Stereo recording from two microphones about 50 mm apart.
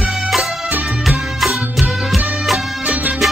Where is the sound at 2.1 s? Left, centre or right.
Right.